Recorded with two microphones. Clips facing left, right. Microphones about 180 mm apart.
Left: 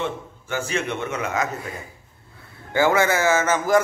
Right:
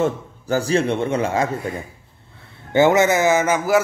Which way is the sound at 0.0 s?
35° right (ahead or behind).